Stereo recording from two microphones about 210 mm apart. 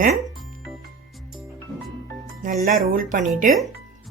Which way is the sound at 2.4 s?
40° right (ahead or behind).